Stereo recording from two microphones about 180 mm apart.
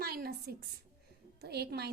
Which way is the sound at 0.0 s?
60° right (ahead or behind).